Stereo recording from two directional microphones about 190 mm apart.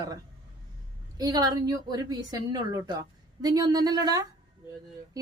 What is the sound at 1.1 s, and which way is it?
A woman's voice, 20° right (ahead or behind).